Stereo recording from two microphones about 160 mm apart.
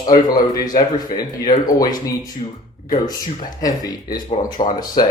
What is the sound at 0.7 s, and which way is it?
Speech, 55° left (ahead or behind).